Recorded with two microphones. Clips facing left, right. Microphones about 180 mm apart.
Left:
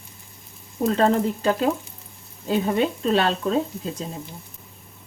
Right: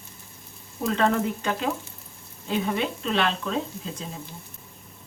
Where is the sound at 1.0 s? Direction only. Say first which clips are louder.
Left 3 dB; 35° left (ahead or behind).